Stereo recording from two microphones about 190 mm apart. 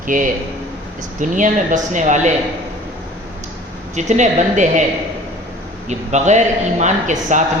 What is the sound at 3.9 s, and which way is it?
Speech, 40° right (ahead or behind).